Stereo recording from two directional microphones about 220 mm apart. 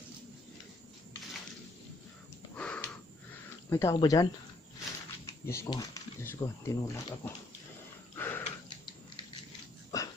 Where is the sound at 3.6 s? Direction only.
10° left (ahead or behind).